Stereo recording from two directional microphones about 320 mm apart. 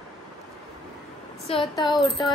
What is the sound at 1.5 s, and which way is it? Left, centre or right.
Speech, centre.